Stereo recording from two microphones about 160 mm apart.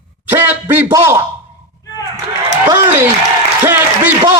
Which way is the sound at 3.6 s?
10° right (ahead or behind).